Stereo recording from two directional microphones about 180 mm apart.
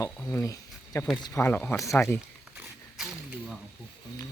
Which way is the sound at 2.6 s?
Centre (ahead or behind).